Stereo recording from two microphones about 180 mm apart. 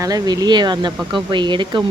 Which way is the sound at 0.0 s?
20° right (ahead or behind).